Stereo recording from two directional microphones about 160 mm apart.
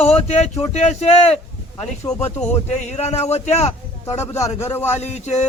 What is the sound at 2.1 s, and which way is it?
Speech, 20° left (ahead or behind).